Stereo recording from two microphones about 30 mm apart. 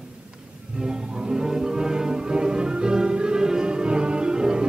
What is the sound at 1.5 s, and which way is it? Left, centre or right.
Music, right.